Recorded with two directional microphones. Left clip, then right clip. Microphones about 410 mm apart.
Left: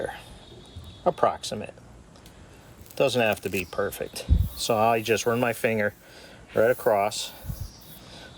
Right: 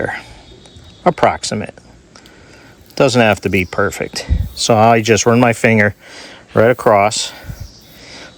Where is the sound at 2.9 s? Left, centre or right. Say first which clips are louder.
Right 11 dB; centre.